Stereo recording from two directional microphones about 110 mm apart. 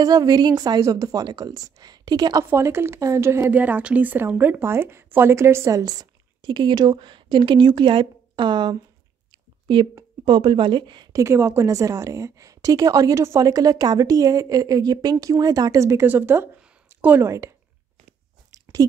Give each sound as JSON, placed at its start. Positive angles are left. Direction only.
{"t": 0.0, "sound": "a woman's voice", "side_deg": -35}
{"t": 2.5, "sound": "speech", "side_deg": -25}
{"t": 10.2, "sound": "a woman's voice", "side_deg": -50}
{"t": 11.1, "sound": "a woman's voice", "side_deg": -25}